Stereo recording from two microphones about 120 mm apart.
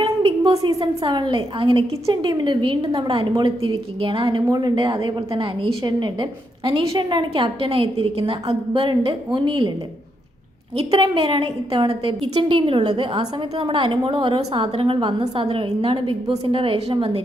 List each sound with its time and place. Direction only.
0.0 s a sound: 45° right (ahead or behind)
0.6 s a woman's voice: 40° right (ahead or behind)
5.3 s a woman's voice: 50° right (ahead or behind)
5.8 s a woman's voice: 35° right (ahead or behind)
10.8 s a woman's voice: 50° right (ahead or behind)